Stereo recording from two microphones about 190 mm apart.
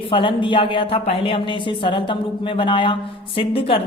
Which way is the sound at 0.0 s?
25° left (ahead or behind).